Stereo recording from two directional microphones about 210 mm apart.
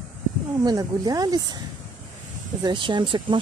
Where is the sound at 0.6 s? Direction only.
20° right (ahead or behind).